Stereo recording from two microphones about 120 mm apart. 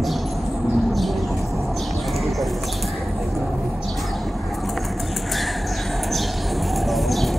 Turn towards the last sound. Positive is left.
turn(degrees=0)  # may be behind; listen again after turning